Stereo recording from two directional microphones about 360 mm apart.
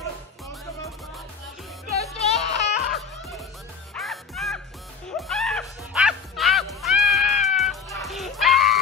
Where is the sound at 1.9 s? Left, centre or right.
Centre.